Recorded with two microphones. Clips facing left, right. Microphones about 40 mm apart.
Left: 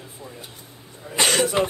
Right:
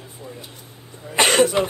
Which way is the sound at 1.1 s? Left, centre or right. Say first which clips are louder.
Right 5 dB; right.